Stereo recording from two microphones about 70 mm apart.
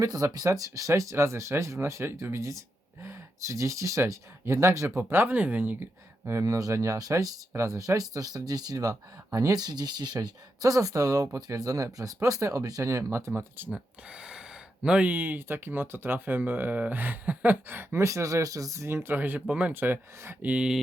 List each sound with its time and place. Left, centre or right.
0.0 s speech: right
4.9 s speech: right
6.3 s speech: right
10.6 s speech: right
13.7 s speech: centre; by 18.9 s right
18.9 s speech: right
19.7 s speech: right
20.4 s speech: centre